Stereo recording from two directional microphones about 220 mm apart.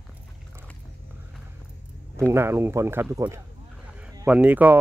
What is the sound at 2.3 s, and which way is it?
Speech, 10° right (ahead or behind).